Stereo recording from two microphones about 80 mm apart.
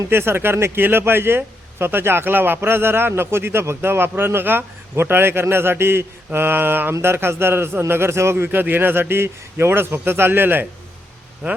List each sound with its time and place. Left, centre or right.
0.1 s speech: right